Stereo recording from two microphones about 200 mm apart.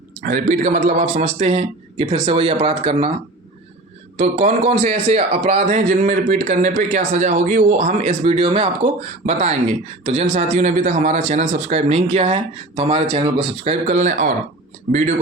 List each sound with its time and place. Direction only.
0.2 s speech: 40° right (ahead or behind)
4.2 s speech: 35° right (ahead or behind)